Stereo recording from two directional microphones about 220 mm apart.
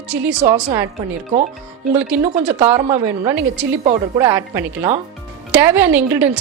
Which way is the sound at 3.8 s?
30° right (ahead or behind).